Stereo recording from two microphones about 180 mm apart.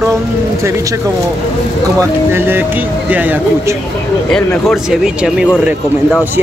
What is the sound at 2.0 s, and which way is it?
Speech, 10° right (ahead or behind).